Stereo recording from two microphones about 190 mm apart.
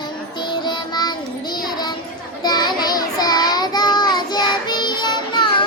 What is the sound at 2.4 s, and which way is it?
Child singing, 20° left (ahead or behind).